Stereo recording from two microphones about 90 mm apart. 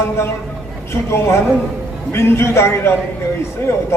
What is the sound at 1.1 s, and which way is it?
A man's voice, 30° left (ahead or behind).